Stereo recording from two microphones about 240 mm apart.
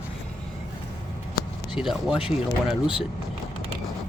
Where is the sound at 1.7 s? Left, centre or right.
Centre.